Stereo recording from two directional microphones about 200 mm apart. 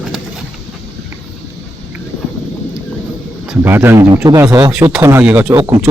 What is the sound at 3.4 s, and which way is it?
Speech, 10° right (ahead or behind).